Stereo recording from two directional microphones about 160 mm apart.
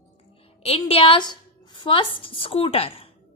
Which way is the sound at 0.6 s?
40° left (ahead or behind).